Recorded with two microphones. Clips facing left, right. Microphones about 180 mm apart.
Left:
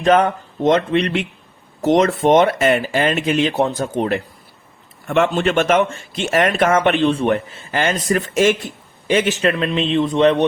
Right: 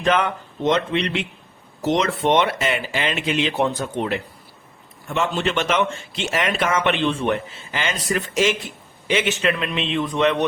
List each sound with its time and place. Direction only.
0.0 s speech: 40° left (ahead or behind)
5.0 s speech: 65° left (ahead or behind); by 10.4 s 30° left (ahead or behind)